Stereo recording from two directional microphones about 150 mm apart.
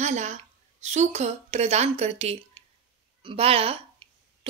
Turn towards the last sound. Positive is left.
turn(degrees=-35)  # may be behind; listen again after turning